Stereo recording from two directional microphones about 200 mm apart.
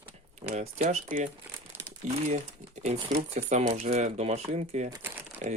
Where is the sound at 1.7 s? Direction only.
10° right (ahead or behind).